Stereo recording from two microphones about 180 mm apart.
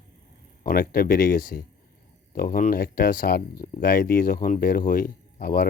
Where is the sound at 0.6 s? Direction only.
55° left (ahead or behind).